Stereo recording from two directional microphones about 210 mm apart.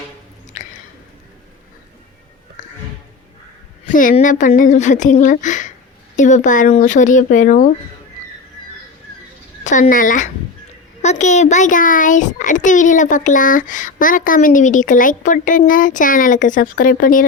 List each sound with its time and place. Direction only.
0.5 s squish: 35° left (ahead or behind)
3.9 s a child's voice: 40° left (ahead or behind)
9.6 s a child's voice: 35° left (ahead or behind)